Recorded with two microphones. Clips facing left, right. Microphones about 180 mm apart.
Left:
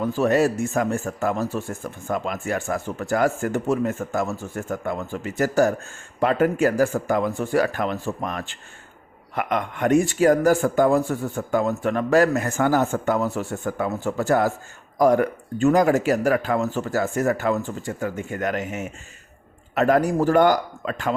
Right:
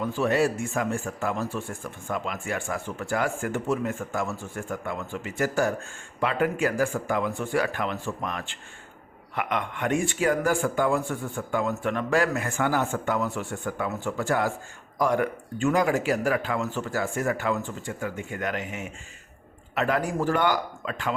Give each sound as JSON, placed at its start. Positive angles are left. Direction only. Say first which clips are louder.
{"t": 0.0, "sound": "speech", "louder": "left 4 dB", "side_deg": 40}